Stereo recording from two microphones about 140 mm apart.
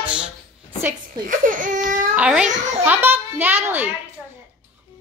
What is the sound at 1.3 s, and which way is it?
Speech, 70° right (ahead or behind).